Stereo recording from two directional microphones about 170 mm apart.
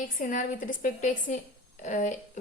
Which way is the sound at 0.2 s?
50° left (ahead or behind).